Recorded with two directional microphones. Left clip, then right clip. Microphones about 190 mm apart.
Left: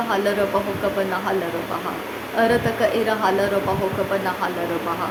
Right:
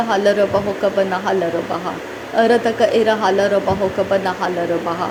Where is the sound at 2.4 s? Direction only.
20° right (ahead or behind).